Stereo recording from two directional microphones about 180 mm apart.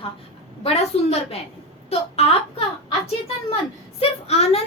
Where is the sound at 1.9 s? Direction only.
35° left (ahead or behind).